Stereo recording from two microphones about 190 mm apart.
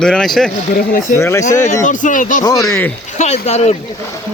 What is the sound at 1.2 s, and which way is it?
Speech, 15° left (ahead or behind).